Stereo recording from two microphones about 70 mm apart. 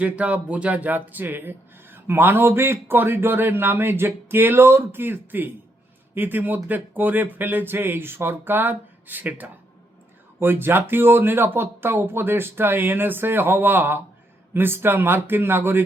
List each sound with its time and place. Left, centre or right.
0.0 s speech: centre